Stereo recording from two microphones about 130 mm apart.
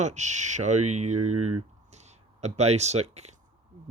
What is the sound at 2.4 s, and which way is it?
Speech, 55° right (ahead or behind).